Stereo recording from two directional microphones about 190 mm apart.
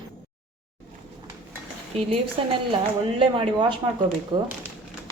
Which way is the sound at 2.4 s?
30° right (ahead or behind).